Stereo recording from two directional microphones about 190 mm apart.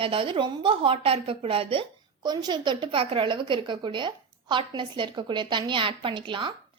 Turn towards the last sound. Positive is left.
turn(degrees=-25)  # may be behind; listen again after turning